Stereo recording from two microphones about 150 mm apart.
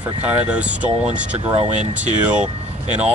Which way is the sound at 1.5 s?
45° right (ahead or behind).